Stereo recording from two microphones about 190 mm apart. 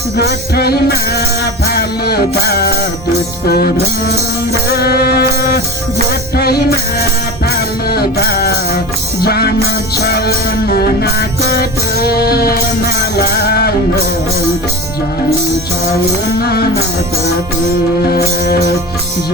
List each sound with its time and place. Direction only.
0.2 s music: 55° left (ahead or behind)
16.4 s music: 55° left (ahead or behind)
18.1 s music: 55° left (ahead or behind)